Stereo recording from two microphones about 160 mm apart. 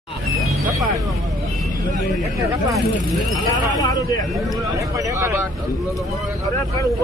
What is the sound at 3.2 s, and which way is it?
Speech, centre (ahead or behind).